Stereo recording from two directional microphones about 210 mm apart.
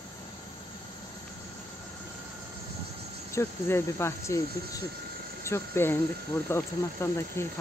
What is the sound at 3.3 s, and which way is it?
Speech, 10° left (ahead or behind).